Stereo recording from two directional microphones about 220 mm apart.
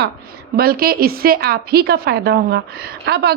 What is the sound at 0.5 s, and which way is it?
A woman's voice, 45° right (ahead or behind).